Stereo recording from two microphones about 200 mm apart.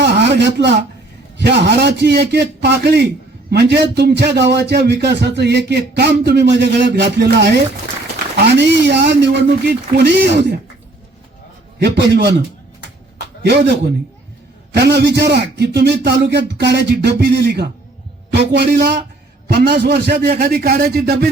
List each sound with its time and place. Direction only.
0.0 s a sound: 60° right (ahead or behind)
1.4 s a man's voice: 60° right (ahead or behind)
11.8 s a man's voice: 55° right (ahead or behind)
13.4 s a man's voice: 55° right (ahead or behind)